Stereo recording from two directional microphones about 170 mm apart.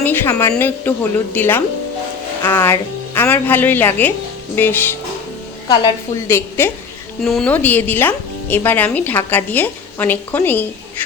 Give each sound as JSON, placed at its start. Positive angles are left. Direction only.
{"t": 0.0, "sound": "a woman's voice", "side_deg": 10}
{"t": 7.2, "sound": "speech", "side_deg": 0}